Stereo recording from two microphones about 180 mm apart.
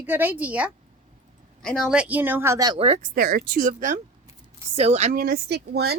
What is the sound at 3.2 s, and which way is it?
Speech, 55° right (ahead or behind).